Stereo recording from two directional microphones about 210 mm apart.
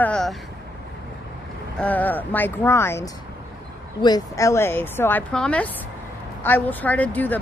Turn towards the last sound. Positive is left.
turn(degrees=10)  # may be behind; listen again after turning